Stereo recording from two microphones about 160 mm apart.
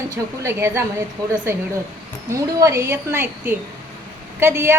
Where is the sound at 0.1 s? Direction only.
15° right (ahead or behind).